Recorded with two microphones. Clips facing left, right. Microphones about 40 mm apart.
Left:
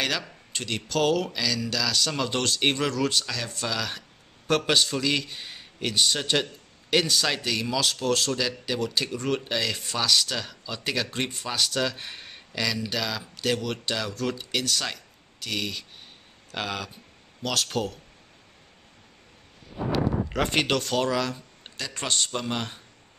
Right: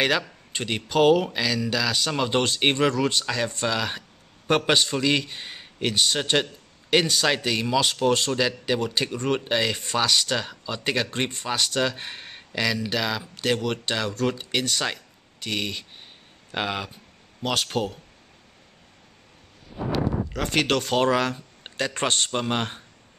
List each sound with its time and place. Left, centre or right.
0.5 s a man's voice: centre
20.3 s speech: centre
20.6 s speech: centre
21.0 s speech: right